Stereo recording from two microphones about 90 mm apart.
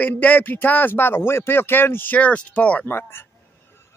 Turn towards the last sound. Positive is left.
turn(degrees=25)  # may be behind; listen again after turning